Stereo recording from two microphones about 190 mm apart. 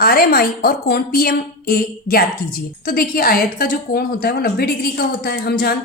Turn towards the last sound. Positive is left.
turn(degrees=55)  # may be behind; listen again after turning